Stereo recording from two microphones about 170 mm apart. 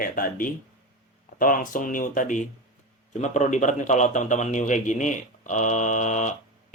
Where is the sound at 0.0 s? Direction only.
55° left (ahead or behind).